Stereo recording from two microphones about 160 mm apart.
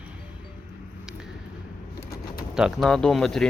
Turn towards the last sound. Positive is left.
turn(degrees=0)  # may be behind; listen again after turning